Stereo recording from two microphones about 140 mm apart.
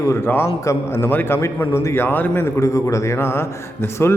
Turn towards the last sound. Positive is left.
turn(degrees=20)  # may be behind; listen again after turning